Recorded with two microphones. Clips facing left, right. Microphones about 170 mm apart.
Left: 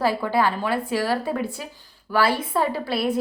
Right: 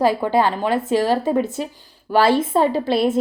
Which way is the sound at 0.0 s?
20° right (ahead or behind).